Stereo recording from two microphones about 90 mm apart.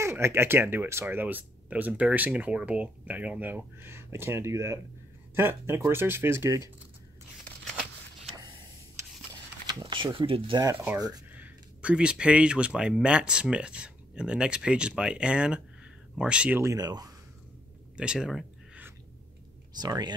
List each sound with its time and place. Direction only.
0.0 s speech: 30° right (ahead or behind)
8.4 s a sound: 60° right (ahead or behind)
9.8 s speech: 65° right (ahead or behind)
11.0 s speech: 45° right (ahead or behind)
11.3 s speech: 15° right (ahead or behind)
16.7 s speech: 45° right (ahead or behind)
17.9 s speech: 10° right (ahead or behind)
19.8 s speech: 50° right (ahead or behind)